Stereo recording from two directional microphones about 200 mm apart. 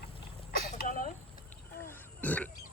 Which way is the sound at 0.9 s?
40° left (ahead or behind).